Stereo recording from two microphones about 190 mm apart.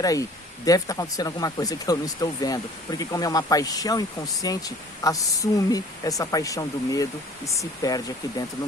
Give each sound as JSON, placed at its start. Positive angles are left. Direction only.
{"t": 0.0, "sound": "speech", "side_deg": 20}